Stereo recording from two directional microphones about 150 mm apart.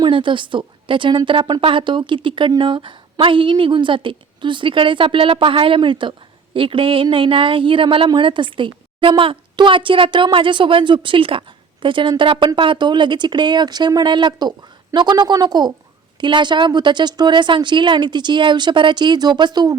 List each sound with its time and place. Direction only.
0.0 s a woman's voice: 35° right (ahead or behind)